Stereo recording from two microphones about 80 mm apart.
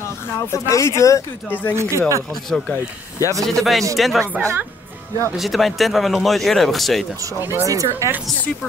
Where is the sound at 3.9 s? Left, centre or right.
Centre.